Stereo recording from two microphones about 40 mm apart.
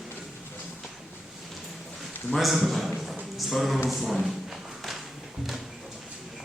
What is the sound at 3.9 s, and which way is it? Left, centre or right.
Speech, centre.